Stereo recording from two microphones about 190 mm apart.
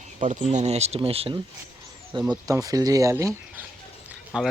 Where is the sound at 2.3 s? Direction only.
20° right (ahead or behind).